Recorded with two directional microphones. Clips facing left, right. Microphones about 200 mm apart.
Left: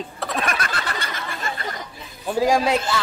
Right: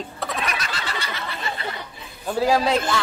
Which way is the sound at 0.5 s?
50° left (ahead or behind).